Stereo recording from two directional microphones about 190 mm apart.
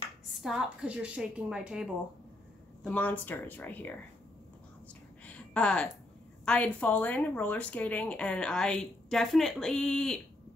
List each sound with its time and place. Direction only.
0.4 s speech: 5° right (ahead or behind)
2.8 s speech: 5° left (ahead or behind)
5.2 s a sound: 5° left (ahead or behind)
6.4 s speech: 5° left (ahead or behind)